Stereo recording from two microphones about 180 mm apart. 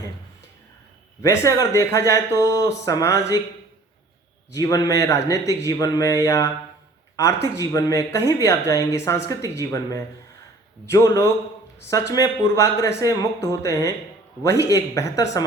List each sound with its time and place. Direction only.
1.2 s speech: 15° left (ahead or behind)
4.5 s a man's voice: 20° left (ahead or behind)